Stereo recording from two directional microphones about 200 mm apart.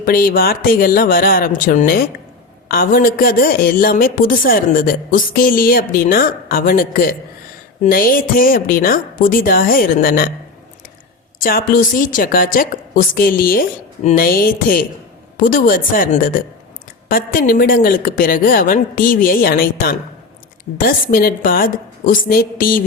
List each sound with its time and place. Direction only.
0.0 s a woman's voice: 45° left (ahead or behind)
11.3 s a woman's voice: 45° left (ahead or behind)
14.0 s speech: 35° left (ahead or behind)
14.3 s a woman's voice: 45° left (ahead or behind)